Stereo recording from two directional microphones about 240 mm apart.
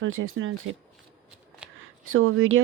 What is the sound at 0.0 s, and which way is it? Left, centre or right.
Speech, right.